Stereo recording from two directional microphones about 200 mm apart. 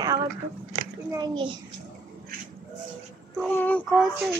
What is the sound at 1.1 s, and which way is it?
Speech, 20° right (ahead or behind).